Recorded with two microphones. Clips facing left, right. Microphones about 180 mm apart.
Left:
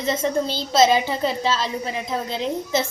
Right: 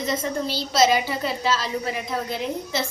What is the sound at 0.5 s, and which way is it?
A woman's voice, 25° left (ahead or behind).